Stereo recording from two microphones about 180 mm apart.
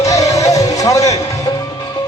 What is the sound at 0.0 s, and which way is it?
Music, 15° left (ahead or behind).